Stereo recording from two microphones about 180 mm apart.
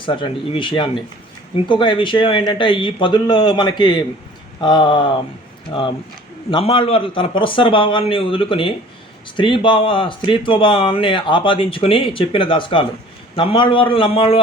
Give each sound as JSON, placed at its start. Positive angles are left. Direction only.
{"t": 0.0, "sound": "speech", "side_deg": 25}